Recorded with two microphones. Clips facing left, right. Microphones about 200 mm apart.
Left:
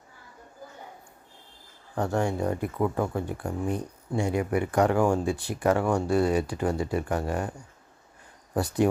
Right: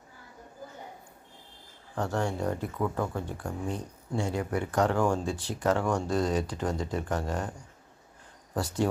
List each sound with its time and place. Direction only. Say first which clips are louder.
2.0 s speech: left 3 dB; 15° left (ahead or behind)
8.5 s speech: left 5 dB; 15° left (ahead or behind)